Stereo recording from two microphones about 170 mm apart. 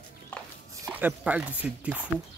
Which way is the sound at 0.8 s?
10° right (ahead or behind).